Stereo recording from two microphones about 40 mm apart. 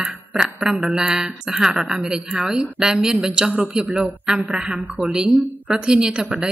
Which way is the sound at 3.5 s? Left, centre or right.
Right.